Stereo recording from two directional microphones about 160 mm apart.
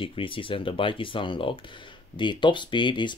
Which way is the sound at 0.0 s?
35° left (ahead or behind).